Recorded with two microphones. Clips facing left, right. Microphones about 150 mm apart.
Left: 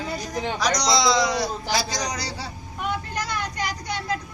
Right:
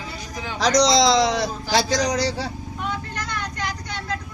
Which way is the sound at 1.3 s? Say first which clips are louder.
Right 3 dB; 90° right.